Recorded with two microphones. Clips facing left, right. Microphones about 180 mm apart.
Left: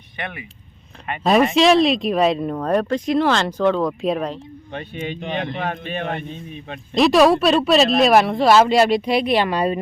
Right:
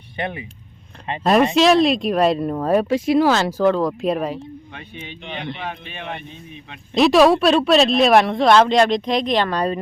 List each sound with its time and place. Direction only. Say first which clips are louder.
0.2 s speech: right 5 dB; 25° right (ahead or behind)
1.2 s speech: even; centre (ahead or behind)
4.9 s speech: left 7 dB; 50° left (ahead or behind)
6.9 s speech: right 1 dB; centre (ahead or behind)